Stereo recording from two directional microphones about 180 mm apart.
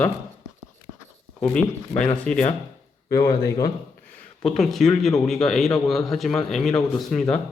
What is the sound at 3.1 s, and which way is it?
Speech, 20° left (ahead or behind).